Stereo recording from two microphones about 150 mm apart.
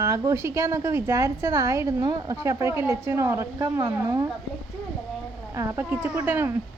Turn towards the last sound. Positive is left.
turn(degrees=-15)  # may be behind; listen again after turning